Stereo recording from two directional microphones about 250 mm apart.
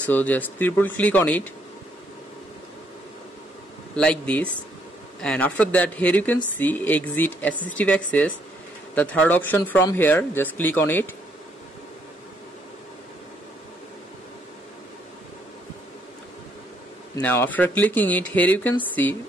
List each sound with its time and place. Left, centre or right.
0.0 s speech: centre
3.9 s speech: centre
17.1 s speech: centre